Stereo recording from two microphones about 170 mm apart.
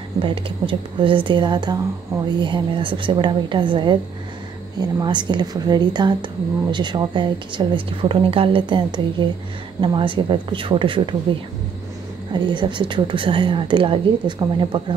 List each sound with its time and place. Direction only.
0.2 s a woman's voice: 30° right (ahead or behind)
12.3 s a woman's voice: 25° right (ahead or behind)